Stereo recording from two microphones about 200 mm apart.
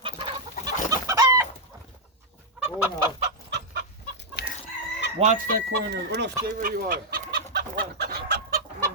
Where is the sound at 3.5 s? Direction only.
50° right (ahead or behind).